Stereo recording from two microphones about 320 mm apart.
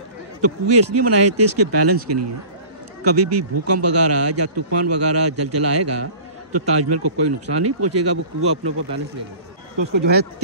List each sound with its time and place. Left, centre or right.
0.4 s speech: right